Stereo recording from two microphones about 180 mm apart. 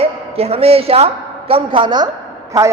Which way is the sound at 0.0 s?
35° right (ahead or behind).